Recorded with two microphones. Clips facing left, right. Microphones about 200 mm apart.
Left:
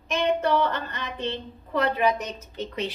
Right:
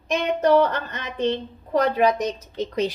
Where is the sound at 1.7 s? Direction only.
40° right (ahead or behind).